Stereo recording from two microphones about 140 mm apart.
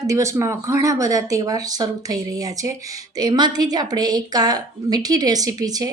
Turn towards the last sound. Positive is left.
turn(degrees=-25)  # may be behind; listen again after turning